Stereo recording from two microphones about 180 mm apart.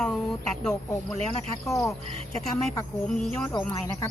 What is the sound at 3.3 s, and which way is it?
Speech, 15° left (ahead or behind).